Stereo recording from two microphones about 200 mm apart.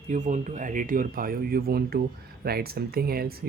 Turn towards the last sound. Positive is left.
turn(degrees=-50)  # may be behind; listen again after turning